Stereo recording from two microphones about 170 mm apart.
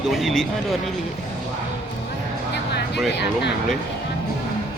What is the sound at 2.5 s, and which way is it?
Music, 80° left.